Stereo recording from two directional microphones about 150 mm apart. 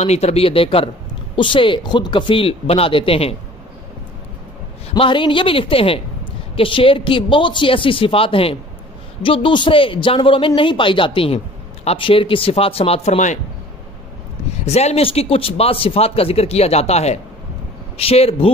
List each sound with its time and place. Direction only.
0.0 s a man's voice: 45° left (ahead or behind)
4.9 s a man's voice: 35° left (ahead or behind); by 13.4 s 50° left (ahead or behind)
14.7 s a man's voice: 45° left (ahead or behind)